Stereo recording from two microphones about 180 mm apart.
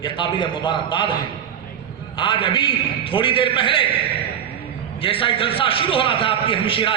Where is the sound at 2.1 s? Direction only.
30° left (ahead or behind).